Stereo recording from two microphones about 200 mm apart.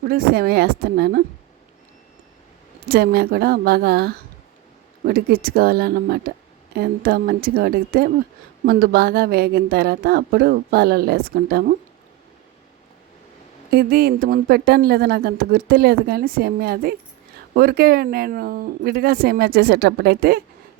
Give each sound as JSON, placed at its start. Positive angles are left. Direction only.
{"t": 0.0, "sound": "speech", "side_deg": -50}
{"t": 2.9, "sound": "speech", "side_deg": -50}
{"t": 13.7, "sound": "speech", "side_deg": -50}